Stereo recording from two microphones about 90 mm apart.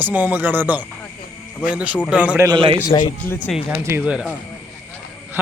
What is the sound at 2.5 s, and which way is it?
Speech, 80° right.